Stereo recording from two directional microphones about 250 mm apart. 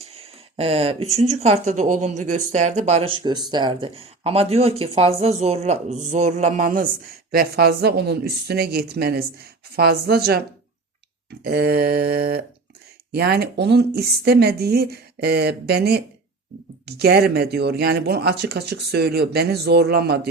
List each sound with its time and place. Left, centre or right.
0.0 s speech: right
11.4 s speech: right